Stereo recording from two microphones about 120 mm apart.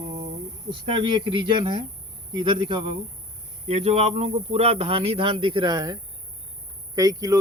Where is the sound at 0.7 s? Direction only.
45° right (ahead or behind).